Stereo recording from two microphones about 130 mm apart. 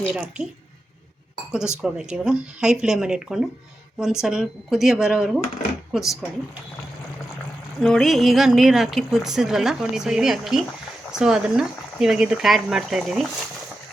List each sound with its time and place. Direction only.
0.1 s a woman's voice: 5° right (ahead or behind)
1.5 s speech: 5° right (ahead or behind)
7.8 s speech: 5° left (ahead or behind)